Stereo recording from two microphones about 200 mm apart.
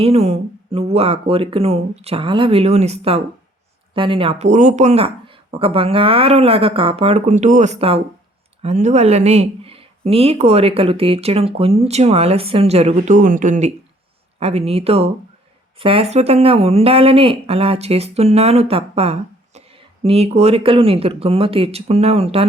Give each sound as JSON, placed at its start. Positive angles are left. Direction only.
{"t": 0.0, "sound": "speech", "side_deg": -30}